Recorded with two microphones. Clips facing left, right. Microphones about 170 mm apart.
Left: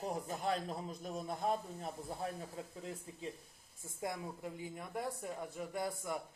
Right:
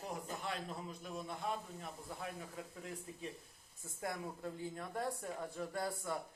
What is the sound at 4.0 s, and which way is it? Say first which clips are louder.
Speech: left 1 dB; 15° left (ahead or behind).